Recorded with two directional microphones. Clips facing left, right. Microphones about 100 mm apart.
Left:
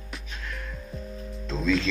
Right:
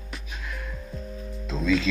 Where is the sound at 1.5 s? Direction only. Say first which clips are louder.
Right 1 dB; 5° right (ahead or behind).